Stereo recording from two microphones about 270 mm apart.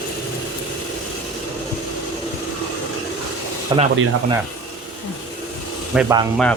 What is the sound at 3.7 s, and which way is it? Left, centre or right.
Speech, centre.